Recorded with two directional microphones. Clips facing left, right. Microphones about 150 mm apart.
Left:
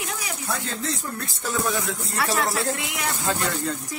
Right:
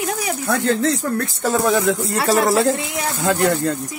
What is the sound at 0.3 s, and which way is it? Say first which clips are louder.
Speech: right 13 dB; 70° right (ahead or behind).